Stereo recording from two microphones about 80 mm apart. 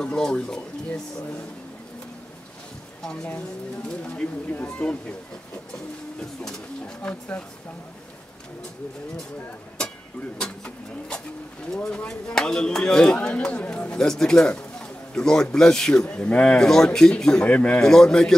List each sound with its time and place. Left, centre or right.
0.0 s speech: centre
3.0 s speech: centre
7.0 s speech: centre
10.3 s speech: centre